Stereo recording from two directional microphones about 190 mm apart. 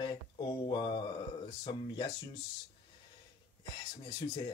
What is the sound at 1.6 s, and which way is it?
Speech, 25° left (ahead or behind).